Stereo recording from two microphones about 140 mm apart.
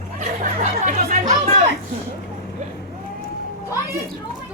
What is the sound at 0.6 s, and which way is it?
Speech, 70° right (ahead or behind).